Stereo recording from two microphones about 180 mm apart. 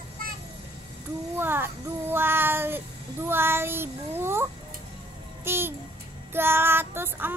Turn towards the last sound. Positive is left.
turn(degrees=-10)  # may be behind; listen again after turning